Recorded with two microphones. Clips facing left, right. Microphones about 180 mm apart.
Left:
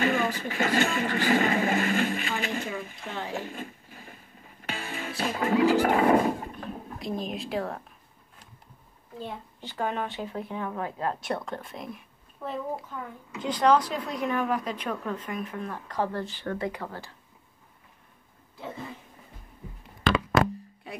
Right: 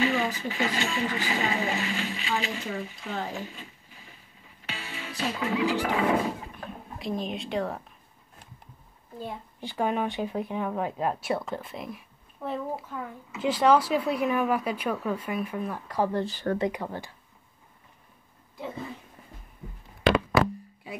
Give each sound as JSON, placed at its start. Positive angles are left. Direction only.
{"t": 0.0, "sound": "music", "side_deg": 50}
{"t": 6.7, "sound": "speech", "side_deg": 0}
{"t": 9.2, "sound": "a woman's voice", "side_deg": -15}
{"t": 16.3, "sound": "speech", "side_deg": -40}
{"t": 16.5, "sound": "a woman's voice", "side_deg": -20}